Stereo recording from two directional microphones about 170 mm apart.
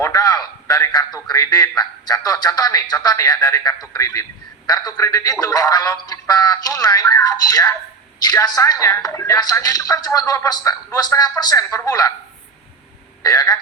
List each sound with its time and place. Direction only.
0.0 s a man's voice: 20° left (ahead or behind)
13.2 s a man's voice: 20° left (ahead or behind)